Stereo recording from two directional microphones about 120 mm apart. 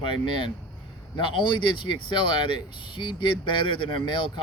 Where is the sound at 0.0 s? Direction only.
40° left (ahead or behind).